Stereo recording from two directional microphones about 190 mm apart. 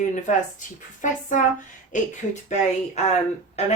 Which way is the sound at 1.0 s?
40° left (ahead or behind).